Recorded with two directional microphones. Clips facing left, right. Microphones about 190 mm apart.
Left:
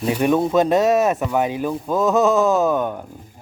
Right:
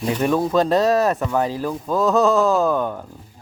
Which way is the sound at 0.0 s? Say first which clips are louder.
Left 2 dB; 10° left (ahead or behind).